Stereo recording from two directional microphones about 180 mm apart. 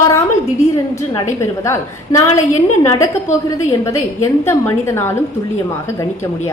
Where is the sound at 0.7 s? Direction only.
15° left (ahead or behind).